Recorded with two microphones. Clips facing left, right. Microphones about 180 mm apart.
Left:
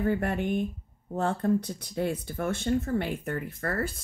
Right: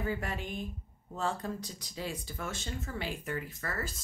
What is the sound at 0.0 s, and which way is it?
Speech, 55° left (ahead or behind).